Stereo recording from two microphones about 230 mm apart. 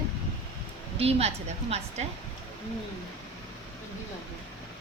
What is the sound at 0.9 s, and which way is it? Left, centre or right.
A woman's voice, right.